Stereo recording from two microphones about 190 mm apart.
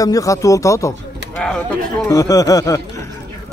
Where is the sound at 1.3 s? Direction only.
5° left (ahead or behind).